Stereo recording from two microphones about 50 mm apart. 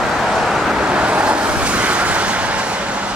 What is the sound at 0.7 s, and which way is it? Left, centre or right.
Vehicle, right.